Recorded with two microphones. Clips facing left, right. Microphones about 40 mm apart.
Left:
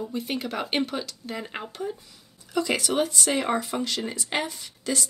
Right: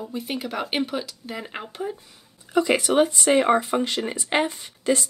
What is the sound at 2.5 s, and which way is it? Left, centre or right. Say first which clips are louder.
Speech: right 5 dB; right.